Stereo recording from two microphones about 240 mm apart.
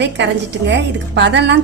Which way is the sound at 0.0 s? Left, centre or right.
Right.